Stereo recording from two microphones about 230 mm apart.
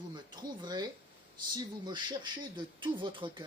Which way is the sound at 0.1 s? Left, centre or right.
Centre.